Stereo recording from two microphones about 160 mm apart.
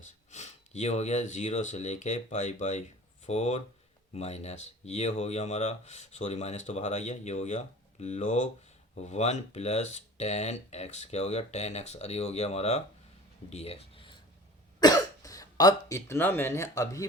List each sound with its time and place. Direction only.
0.0 s speech: 45° left (ahead or behind)
14.8 s speech: 25° left (ahead or behind)